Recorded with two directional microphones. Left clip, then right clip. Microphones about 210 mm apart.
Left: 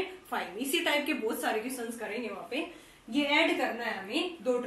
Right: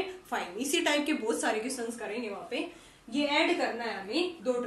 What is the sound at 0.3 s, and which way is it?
A woman's voice, 20° right (ahead or behind).